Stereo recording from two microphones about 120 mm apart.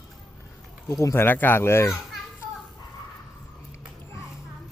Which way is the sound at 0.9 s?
25° left (ahead or behind).